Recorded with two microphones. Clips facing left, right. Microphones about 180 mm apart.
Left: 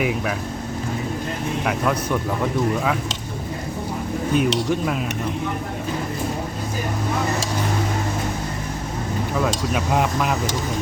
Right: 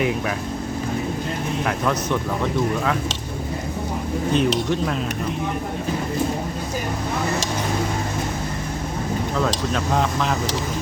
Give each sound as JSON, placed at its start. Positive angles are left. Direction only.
{"t": 0.0, "sound": "speech", "side_deg": 5}
{"t": 1.6, "sound": "speech", "side_deg": 5}
{"t": 4.4, "sound": "speech", "side_deg": 10}
{"t": 9.3, "sound": "speech", "side_deg": 10}